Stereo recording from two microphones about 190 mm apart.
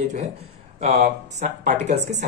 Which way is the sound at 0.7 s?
40° right (ahead or behind).